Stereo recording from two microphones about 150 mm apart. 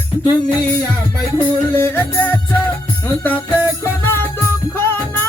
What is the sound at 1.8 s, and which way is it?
Music, 15° left (ahead or behind).